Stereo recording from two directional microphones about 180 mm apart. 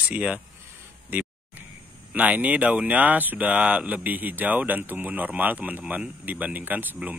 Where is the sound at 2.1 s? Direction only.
10° right (ahead or behind).